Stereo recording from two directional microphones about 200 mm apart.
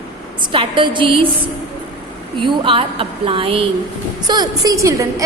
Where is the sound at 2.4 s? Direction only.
25° right (ahead or behind).